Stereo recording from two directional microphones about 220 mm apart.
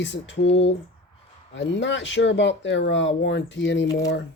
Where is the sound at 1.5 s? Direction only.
55° left (ahead or behind).